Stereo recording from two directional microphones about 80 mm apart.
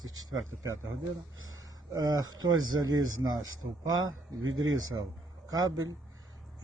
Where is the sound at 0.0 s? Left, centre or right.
Right.